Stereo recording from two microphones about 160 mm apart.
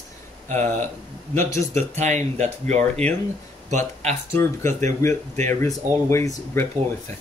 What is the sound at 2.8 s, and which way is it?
Speech, 10° left (ahead or behind).